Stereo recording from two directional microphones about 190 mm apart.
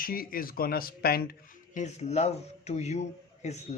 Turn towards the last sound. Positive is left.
turn(degrees=35)  # may be behind; listen again after turning